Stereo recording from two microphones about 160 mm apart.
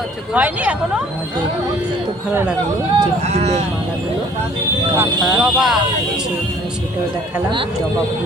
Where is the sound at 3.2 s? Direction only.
40° right (ahead or behind).